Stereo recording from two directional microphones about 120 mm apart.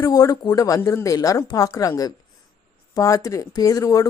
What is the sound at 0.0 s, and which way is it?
Speech, 30° left (ahead or behind).